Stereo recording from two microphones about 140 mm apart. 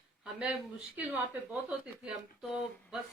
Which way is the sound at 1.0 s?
10° right (ahead or behind).